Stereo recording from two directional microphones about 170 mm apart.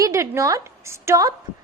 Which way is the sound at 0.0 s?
15° right (ahead or behind).